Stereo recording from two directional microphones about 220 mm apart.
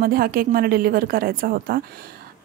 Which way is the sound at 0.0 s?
40° right (ahead or behind).